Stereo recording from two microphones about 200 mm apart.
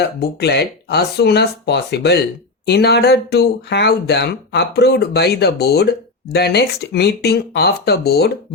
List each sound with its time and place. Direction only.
0.0 s speech: 55° left (ahead or behind)